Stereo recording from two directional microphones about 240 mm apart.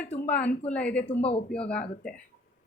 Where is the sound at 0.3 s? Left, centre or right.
Centre.